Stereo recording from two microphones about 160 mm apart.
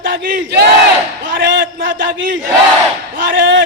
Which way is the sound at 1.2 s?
60° right (ahead or behind).